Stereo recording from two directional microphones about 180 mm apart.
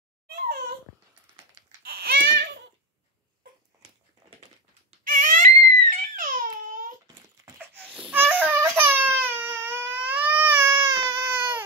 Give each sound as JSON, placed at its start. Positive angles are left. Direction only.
{"t": 1.8, "sound": "babbling", "side_deg": -60}
{"t": 5.0, "sound": "crying", "side_deg": -45}
{"t": 8.1, "sound": "baby cry", "side_deg": -10}